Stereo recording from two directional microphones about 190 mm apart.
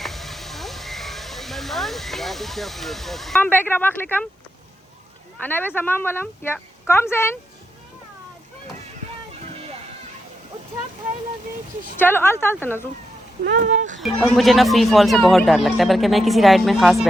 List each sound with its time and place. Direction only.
0.0 s speech: centre (ahead or behind)
5.4 s a woman's voice: 10° left (ahead or behind)
11.9 s a woman's voice: 10° left (ahead or behind)
13.7 s speech: 40° right (ahead or behind)
14.0 s speech: 5° left (ahead or behind)